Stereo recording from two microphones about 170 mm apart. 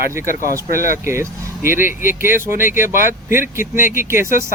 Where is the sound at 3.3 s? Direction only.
15° right (ahead or behind).